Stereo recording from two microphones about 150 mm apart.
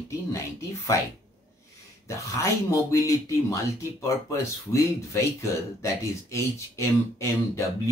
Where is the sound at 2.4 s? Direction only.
20° left (ahead or behind).